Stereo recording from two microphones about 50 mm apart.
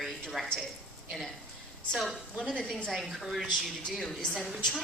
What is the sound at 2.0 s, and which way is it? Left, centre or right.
Speech, centre.